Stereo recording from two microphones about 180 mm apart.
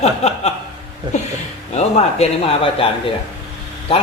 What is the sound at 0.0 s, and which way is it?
Chuckle, 35° left (ahead or behind).